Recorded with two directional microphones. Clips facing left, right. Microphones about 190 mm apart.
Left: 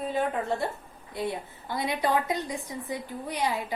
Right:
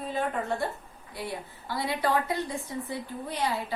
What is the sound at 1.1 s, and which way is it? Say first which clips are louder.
A woman's voice: left 4 dB; 20° left (ahead or behind).